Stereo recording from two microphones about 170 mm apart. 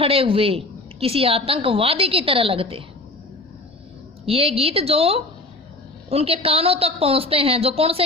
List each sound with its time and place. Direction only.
0.0 s a woman's voice: 35° right (ahead or behind)
4.3 s a woman's voice: 35° right (ahead or behind)